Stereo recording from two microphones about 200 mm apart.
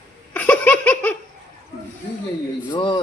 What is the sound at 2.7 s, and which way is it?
Speech, 25° left (ahead or behind).